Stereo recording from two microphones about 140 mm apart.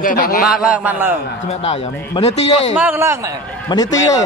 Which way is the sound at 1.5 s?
50° left (ahead or behind).